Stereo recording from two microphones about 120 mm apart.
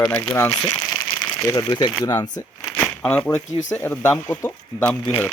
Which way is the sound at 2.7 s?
10° left (ahead or behind).